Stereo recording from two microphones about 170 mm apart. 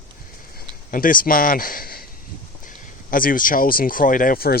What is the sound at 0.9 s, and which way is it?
Speech, 55° left (ahead or behind).